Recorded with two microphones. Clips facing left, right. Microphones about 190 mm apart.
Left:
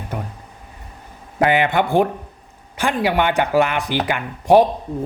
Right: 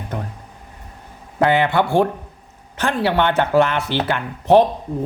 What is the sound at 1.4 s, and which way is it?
Speech, 15° left (ahead or behind).